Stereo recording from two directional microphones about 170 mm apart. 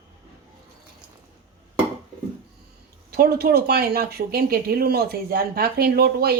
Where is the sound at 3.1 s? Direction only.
65° right (ahead or behind).